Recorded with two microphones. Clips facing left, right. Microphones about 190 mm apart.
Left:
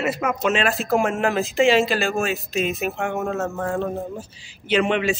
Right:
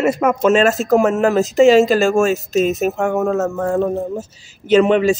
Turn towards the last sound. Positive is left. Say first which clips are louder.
# right 8 dB
turn(degrees=-40)  # may be behind; listen again after turning